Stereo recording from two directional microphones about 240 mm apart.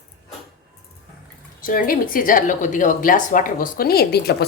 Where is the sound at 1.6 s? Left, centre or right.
Left.